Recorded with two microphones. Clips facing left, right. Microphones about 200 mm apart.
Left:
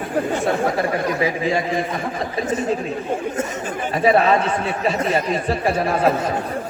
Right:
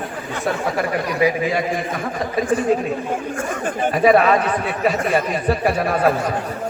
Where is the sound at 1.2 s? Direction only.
30° left (ahead or behind).